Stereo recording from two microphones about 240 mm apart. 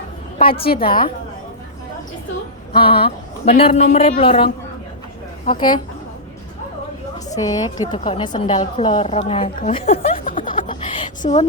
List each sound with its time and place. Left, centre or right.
0.6 s a woman's voice: left
2.7 s a woman's voice: left
5.5 s a woman's voice: centre
7.3 s a woman's voice: centre